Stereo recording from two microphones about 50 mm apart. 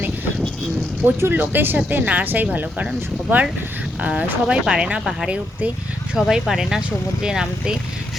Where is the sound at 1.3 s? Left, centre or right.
Right.